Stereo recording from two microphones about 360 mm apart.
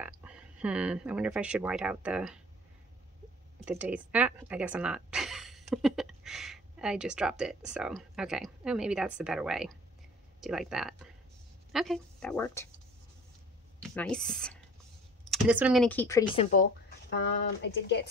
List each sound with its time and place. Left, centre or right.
0.0 s speech: centre
3.6 s speech: centre
13.7 s speech: centre
17.1 s speech: left